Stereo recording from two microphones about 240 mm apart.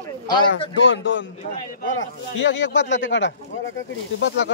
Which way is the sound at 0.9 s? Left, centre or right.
Left.